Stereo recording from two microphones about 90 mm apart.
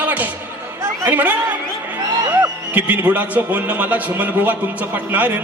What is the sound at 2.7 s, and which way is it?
A man's voice, 20° right (ahead or behind).